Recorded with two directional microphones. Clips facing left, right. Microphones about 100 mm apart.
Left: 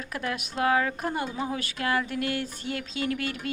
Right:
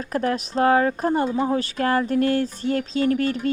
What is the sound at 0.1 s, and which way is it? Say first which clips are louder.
Speech: right 10 dB; 40° right (ahead or behind).